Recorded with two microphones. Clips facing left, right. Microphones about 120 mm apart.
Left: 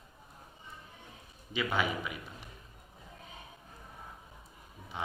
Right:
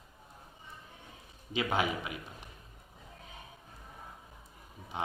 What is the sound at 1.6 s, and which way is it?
Speech, 25° right (ahead or behind).